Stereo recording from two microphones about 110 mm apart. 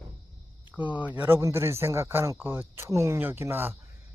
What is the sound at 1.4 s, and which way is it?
Speech, 25° right (ahead or behind).